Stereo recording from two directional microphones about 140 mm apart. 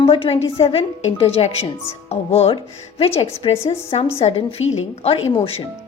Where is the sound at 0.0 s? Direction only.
40° left (ahead or behind).